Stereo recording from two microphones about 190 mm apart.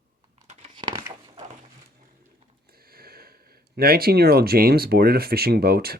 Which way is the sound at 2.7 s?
55° right (ahead or behind).